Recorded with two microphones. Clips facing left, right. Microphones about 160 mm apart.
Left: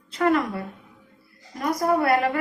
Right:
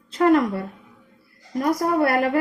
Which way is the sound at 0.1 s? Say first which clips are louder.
Right 4 dB; 35° right (ahead or behind).